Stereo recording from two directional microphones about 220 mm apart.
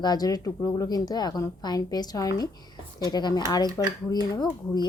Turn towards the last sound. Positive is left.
turn(degrees=20)  # may be behind; listen again after turning